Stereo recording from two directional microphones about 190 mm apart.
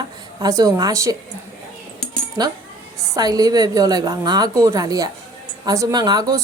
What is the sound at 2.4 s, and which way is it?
A woman's voice, 20° right (ahead or behind).